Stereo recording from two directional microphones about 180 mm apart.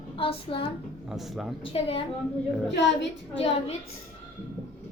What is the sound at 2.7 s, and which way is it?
Speech, 80° left.